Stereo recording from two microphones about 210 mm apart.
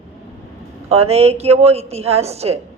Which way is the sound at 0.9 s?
30° right (ahead or behind).